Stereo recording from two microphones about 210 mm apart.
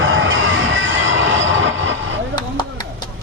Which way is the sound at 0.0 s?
65° right (ahead or behind).